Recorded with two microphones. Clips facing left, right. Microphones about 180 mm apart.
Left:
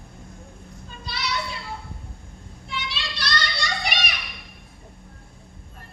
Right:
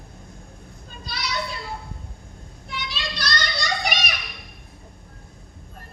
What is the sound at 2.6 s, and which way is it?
Children playing, 40° right (ahead or behind).